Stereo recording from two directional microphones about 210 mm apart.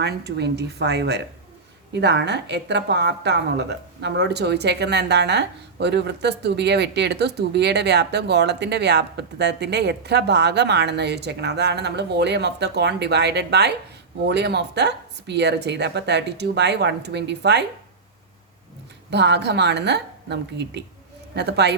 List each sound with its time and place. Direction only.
0.0 s a woman's voice: 50° right (ahead or behind)
19.1 s a woman's voice: 55° right (ahead or behind)